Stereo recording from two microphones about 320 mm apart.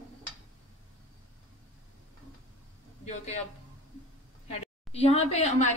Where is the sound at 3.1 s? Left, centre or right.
Left.